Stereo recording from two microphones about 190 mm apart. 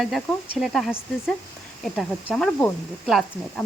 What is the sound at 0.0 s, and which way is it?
Speech, centre (ahead or behind).